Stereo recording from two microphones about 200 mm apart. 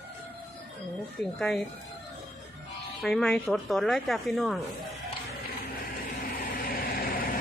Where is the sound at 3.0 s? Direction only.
Centre (ahead or behind).